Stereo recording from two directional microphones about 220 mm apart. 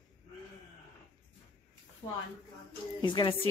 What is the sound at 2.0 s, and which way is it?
A woman's voice, 25° left (ahead or behind).